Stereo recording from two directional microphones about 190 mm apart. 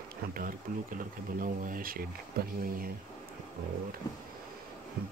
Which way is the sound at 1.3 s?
45° right (ahead or behind).